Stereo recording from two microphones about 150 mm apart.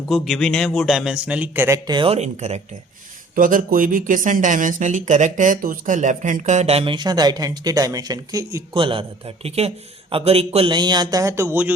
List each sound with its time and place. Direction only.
0.1 s a man's voice: centre (ahead or behind); by 1.8 s 15° right (ahead or behind)
1.9 s speech: 30° right (ahead or behind)
2.1 s speech: 50° right (ahead or behind)
3.3 s speech: 65° right (ahead or behind); by 11.7 s 15° right (ahead or behind)